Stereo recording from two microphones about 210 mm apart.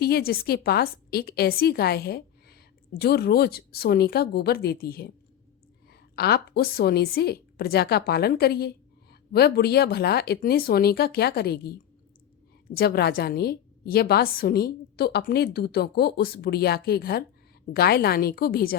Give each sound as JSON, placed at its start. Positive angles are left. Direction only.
{"t": 0.0, "sound": "a woman's voice", "side_deg": 45}